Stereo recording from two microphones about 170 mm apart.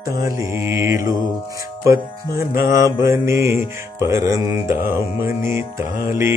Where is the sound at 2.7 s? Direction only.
15° right (ahead or behind).